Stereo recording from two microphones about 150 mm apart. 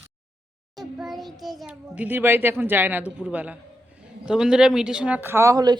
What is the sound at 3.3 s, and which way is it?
Speech, 10° right (ahead or behind).